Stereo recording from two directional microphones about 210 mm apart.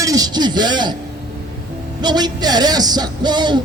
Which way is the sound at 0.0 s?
15° right (ahead or behind).